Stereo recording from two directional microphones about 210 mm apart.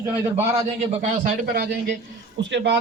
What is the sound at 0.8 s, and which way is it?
Speech, 30° right (ahead or behind).